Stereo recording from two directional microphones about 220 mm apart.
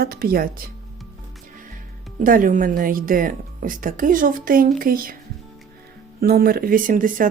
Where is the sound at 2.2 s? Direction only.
40° right (ahead or behind).